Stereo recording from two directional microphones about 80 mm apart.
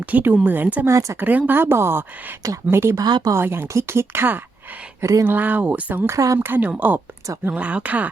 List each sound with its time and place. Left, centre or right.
0.0 s a woman's voice: centre
0.9 s speech: right
1.2 s a woman's voice: right
2.9 s speech: right
3.3 s a woman's voice: right
4.9 s speech: right
5.2 s a woman's voice: right
6.1 s a woman's voice: right
6.4 s a woman's voice: right